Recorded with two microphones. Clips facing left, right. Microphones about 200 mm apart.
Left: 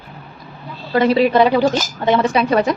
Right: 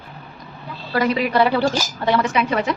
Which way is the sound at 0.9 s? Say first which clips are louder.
Left 5 dB; 30° left (ahead or behind).